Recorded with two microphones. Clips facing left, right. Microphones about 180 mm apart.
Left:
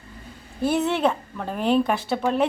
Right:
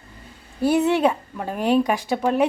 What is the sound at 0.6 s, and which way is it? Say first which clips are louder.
Speech: right 3 dB; 10° right (ahead or behind).